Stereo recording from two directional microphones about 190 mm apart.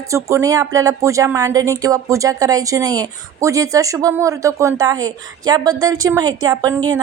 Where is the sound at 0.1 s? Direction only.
15° right (ahead or behind).